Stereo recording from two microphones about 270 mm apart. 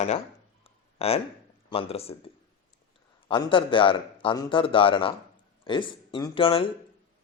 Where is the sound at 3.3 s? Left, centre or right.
Centre.